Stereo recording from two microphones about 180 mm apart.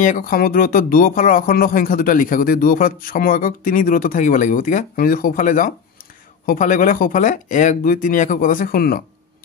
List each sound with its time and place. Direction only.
0.0 s speech: 50° left (ahead or behind)